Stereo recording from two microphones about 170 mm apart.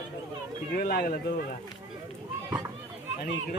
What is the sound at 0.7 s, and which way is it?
Speech, 60° left (ahead or behind).